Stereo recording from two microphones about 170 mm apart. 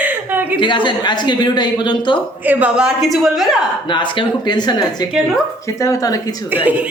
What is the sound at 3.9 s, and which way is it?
Speech, 25° left (ahead or behind).